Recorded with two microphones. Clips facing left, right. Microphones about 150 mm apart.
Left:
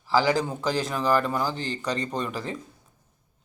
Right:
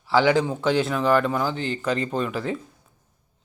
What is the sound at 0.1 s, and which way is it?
Speech, 40° left (ahead or behind).